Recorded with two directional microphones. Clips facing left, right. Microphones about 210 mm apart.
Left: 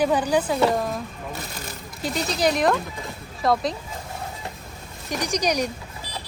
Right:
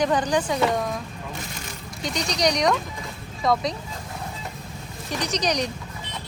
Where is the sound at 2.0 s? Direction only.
5° left (ahead or behind).